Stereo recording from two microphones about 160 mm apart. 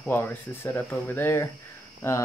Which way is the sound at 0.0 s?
10° left (ahead or behind).